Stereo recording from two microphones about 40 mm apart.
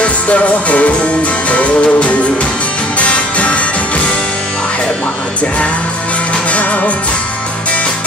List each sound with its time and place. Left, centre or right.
0.0 s music: left
6.5 s music: left